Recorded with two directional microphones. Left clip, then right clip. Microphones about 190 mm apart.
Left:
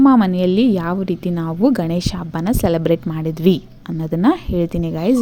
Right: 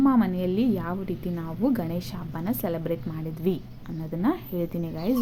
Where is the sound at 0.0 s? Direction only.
50° left (ahead or behind).